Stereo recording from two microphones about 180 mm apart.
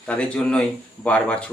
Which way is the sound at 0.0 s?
5° left (ahead or behind).